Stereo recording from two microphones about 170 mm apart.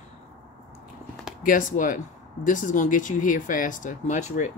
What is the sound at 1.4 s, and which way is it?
Speech, 55° left (ahead or behind).